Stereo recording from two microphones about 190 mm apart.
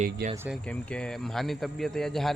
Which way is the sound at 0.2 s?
55° right (ahead or behind).